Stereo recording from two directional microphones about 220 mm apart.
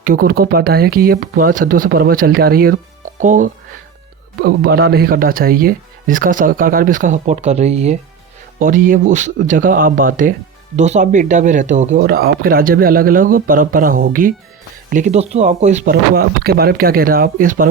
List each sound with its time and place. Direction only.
0.0 s speech: 40° right (ahead or behind)
11.9 s speech: 45° right (ahead or behind)